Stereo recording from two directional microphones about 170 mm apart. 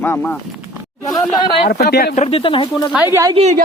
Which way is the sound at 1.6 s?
65° left (ahead or behind).